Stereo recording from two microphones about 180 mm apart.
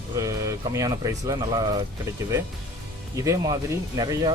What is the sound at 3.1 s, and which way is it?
Speech, 20° right (ahead or behind).